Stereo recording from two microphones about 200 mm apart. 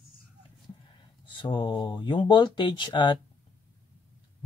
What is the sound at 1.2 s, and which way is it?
Speech, 25° left (ahead or behind).